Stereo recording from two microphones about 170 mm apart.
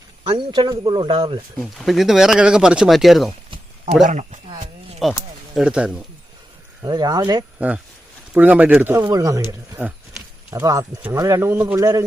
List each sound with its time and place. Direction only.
0.3 s a man's voice: 30° right (ahead or behind)
1.5 s speech: centre (ahead or behind)
4.0 s speech: 45° right (ahead or behind)
5.0 s speech: centre (ahead or behind)
6.8 s a man's voice: 25° right (ahead or behind)
8.3 s speech: 10° right (ahead or behind)